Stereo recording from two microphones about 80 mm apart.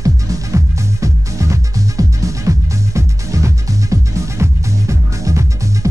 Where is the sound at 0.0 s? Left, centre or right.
Right.